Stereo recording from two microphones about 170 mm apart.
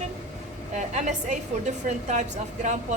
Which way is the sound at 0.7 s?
45° right (ahead or behind).